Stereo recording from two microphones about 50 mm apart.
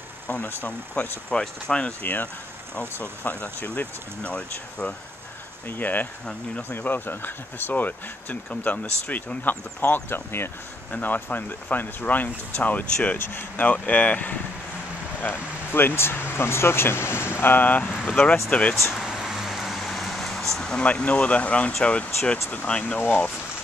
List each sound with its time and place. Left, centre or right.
1.0 s speech: left
1.9 s speech: left
5.7 s speech: left
8.5 s speech: left
10.9 s speech: left
13.2 s speech: left
13.6 s speech: left
15.2 s speech: left
19.0 s vehicle: centre
20.8 s speech: left
22.9 s speech: left